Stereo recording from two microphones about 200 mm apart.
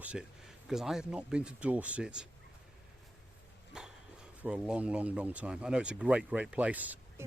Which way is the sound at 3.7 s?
5° right (ahead or behind).